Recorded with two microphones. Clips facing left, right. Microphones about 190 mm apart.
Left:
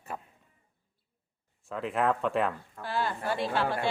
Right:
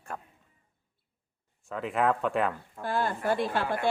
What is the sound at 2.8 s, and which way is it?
A woman's voice, 50° right (ahead or behind).